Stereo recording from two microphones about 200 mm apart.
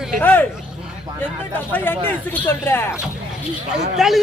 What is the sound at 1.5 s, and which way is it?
Speech, 10° left (ahead or behind).